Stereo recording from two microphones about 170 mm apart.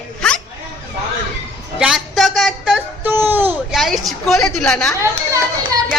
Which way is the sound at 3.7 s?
Centre (ahead or behind).